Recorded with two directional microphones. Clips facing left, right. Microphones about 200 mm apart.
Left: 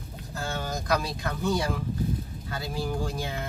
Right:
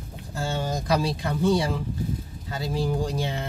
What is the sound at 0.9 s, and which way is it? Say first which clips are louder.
Speech: right 3 dB; 30° right (ahead or behind).